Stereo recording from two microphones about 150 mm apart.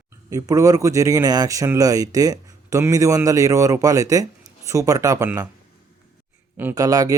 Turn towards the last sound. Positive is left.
turn(degrees=-25)  # may be behind; listen again after turning